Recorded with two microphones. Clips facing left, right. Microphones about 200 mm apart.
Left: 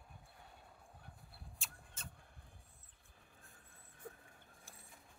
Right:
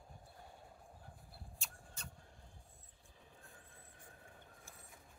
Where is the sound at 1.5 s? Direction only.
Centre (ahead or behind).